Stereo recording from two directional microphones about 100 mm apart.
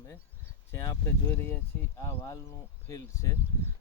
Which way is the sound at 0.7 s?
30° left (ahead or behind).